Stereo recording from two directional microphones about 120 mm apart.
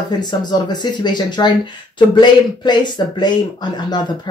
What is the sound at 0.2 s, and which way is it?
Speech, 35° left (ahead or behind).